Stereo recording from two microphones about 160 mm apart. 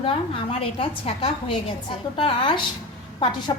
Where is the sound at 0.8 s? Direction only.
35° left (ahead or behind).